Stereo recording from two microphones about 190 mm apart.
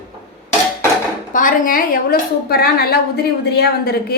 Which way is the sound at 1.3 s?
45° left (ahead or behind).